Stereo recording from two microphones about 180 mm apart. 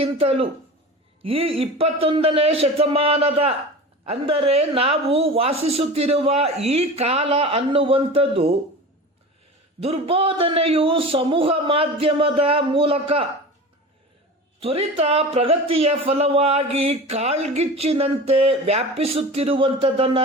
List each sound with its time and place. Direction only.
0.0 s speech: 30° right (ahead or behind)
9.8 s speech: 30° right (ahead or behind)
14.6 s speech: 30° right (ahead or behind)